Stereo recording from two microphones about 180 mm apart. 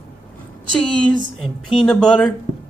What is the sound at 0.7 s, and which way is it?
Speech, 5° left (ahead or behind).